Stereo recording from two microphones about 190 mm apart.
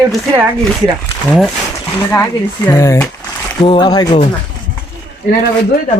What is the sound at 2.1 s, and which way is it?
Speech, 15° left (ahead or behind).